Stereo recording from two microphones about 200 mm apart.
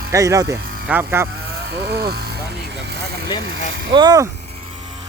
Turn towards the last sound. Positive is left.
turn(degrees=-20)  # may be behind; listen again after turning